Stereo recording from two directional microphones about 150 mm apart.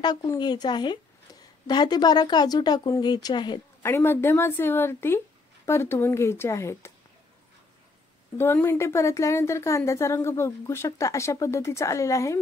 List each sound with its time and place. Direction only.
0.0 s a woman's voice: 30° left (ahead or behind)
3.8 s a woman's voice: 15° left (ahead or behind)
8.4 s a woman's voice: 15° left (ahead or behind)